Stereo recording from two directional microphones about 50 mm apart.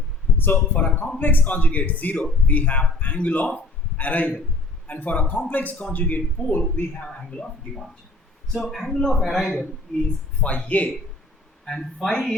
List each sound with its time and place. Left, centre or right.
0.3 s a man's voice: left
6.6 s speech: centre
8.5 s speech: centre
9.9 s a man's voice: centre
10.4 s speech: left
11.6 s a man's voice: centre